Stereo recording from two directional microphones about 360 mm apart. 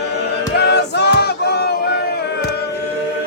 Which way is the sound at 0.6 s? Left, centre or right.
Left.